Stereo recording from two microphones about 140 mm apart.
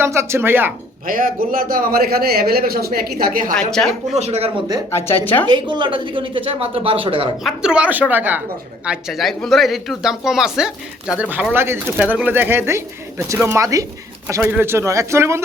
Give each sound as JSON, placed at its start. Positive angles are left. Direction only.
{"t": 0.0, "sound": "speech", "side_deg": -20}
{"t": 1.0, "sound": "a man's voice", "side_deg": -85}
{"t": 3.5, "sound": "speech", "side_deg": 5}
{"t": 4.2, "sound": "speech", "side_deg": -50}
{"t": 4.9, "sound": "a woman's voice", "side_deg": 15}
{"t": 5.5, "sound": "speech", "side_deg": -35}
{"t": 7.4, "sound": "speech", "side_deg": -5}